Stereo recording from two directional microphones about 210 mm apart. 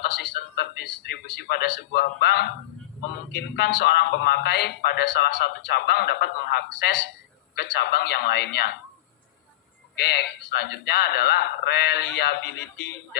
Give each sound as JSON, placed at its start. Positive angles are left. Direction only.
{"t": 0.0, "sound": "speech", "side_deg": 50}
{"t": 9.9, "sound": "speech", "side_deg": 50}